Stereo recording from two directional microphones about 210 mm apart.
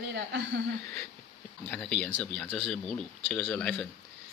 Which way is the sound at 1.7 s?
5° left (ahead or behind).